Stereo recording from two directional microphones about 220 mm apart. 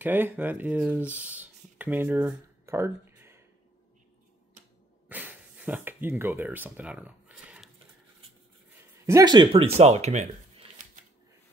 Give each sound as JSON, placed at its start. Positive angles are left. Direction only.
{"t": 0.0, "sound": "speech", "side_deg": -10}
{"t": 5.0, "sound": "a sound", "side_deg": -10}
{"t": 9.0, "sound": "speech", "side_deg": -15}